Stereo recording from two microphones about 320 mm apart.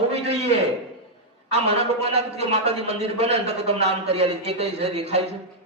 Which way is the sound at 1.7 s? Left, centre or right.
Centre.